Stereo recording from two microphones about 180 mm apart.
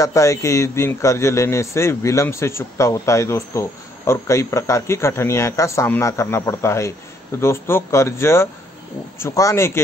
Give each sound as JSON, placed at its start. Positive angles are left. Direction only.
{"t": 0.0, "sound": "a man's voice", "side_deg": 15}